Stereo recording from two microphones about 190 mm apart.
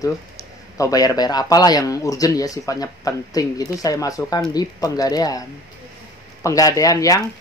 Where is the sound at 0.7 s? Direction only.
20° left (ahead or behind).